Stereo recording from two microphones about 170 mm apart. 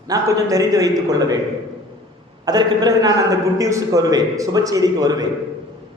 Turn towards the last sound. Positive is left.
turn(degrees=-20)  # may be behind; listen again after turning